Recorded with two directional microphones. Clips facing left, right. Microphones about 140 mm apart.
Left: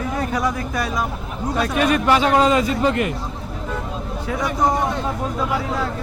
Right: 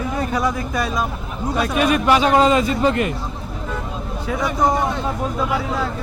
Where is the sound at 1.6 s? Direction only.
10° right (ahead or behind); by 3.1 s 30° right (ahead or behind).